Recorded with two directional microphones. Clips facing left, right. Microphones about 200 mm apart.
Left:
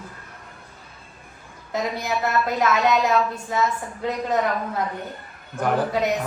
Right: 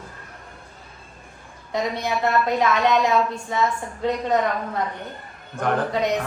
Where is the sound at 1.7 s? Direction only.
Centre (ahead or behind).